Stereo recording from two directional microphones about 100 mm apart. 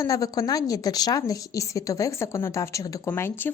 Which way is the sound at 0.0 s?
35° left (ahead or behind).